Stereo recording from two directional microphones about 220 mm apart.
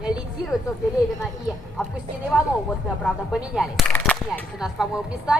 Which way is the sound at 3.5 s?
Centre (ahead or behind).